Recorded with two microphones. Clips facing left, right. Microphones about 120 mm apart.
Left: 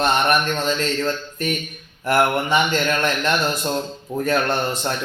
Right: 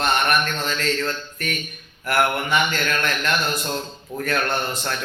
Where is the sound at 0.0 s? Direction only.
20° left (ahead or behind).